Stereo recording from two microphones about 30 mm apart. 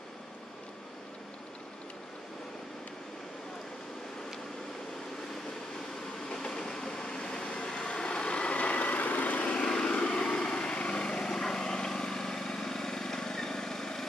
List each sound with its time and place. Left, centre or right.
6.1 s train: centre
7.4 s vehicle: left
8.5 s vehicle: left
8.9 s vehicle: left
9.7 s vehicle: left
10.5 s lawn mower: left
11.3 s vehicle: centre